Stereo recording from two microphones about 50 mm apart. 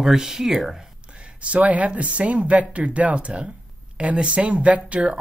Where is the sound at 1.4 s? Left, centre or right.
Right.